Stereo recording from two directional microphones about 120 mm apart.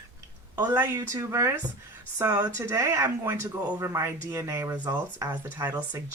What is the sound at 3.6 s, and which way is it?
Speech, 15° right (ahead or behind).